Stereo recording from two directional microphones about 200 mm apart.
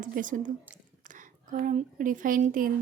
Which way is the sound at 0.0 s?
40° right (ahead or behind).